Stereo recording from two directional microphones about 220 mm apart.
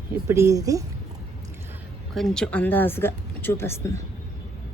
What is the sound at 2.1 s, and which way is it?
Speech, centre (ahead or behind).